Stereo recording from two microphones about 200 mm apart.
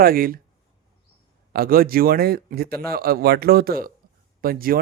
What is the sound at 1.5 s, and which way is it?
Speech, 45° right (ahead or behind).